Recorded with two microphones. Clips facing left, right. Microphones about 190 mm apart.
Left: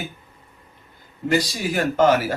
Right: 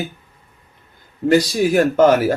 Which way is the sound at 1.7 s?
50° right (ahead or behind).